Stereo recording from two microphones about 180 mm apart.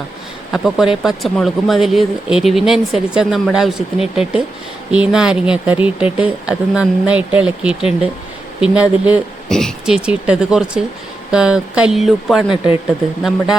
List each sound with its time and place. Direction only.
0.5 s speech: centre (ahead or behind)
9.5 s speech: 5° left (ahead or behind)